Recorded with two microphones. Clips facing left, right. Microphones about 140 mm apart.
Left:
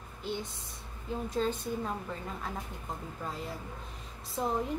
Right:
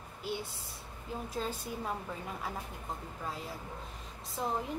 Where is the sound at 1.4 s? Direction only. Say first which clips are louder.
Left 7 dB; 5° right (ahead or behind).